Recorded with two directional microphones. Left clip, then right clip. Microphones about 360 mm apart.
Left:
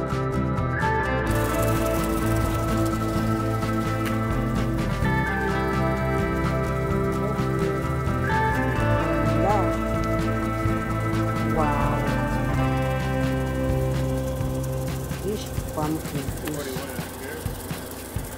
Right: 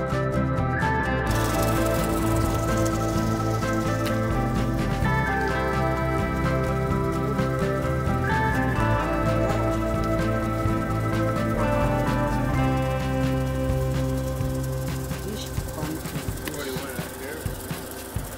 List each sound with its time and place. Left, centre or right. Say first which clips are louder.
0.1 s music: right 1 dB; centre